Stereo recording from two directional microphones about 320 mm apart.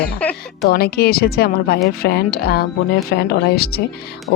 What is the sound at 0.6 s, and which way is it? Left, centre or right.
A woman's voice, left.